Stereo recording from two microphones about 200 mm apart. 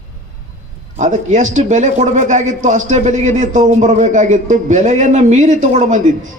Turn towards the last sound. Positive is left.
turn(degrees=-40)  # may be behind; listen again after turning